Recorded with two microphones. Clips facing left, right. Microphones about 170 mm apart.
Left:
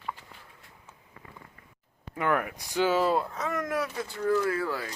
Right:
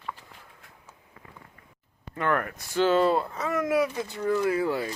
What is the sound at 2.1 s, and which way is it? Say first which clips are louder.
Speech: right 1 dB; 10° left (ahead or behind).